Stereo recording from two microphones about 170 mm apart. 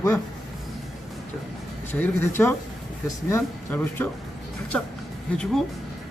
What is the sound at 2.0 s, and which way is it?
Speech, 10° left (ahead or behind).